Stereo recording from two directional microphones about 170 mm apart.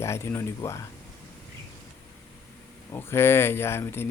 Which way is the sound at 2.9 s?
15° left (ahead or behind).